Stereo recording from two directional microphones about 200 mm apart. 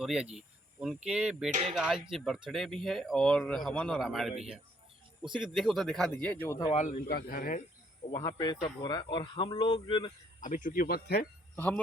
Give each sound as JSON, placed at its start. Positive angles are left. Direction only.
{"t": 0.0, "sound": "speech", "side_deg": -5}
{"t": 1.5, "sound": "speech", "side_deg": -35}
{"t": 1.7, "sound": "speech", "side_deg": 0}
{"t": 7.1, "sound": "speech", "side_deg": 50}
{"t": 8.1, "sound": "speech", "side_deg": 20}
{"t": 10.4, "sound": "speech", "side_deg": 40}
{"t": 11.5, "sound": "speech", "side_deg": 10}